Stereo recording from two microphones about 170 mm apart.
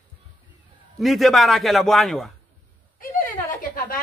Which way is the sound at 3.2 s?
55° left (ahead or behind).